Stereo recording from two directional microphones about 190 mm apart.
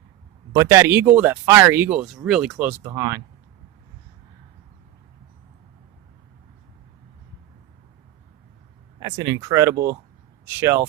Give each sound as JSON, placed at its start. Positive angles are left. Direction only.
{"t": 0.5, "sound": "speech", "side_deg": -15}
{"t": 9.0, "sound": "speech", "side_deg": -20}